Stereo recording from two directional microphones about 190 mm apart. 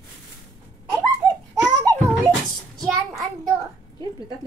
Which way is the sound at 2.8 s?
Centre (ahead or behind).